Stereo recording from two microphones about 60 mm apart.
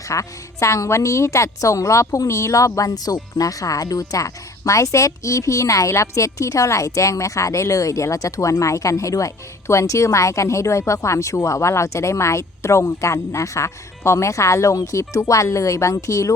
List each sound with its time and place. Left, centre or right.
0.1 s a woman's voice: left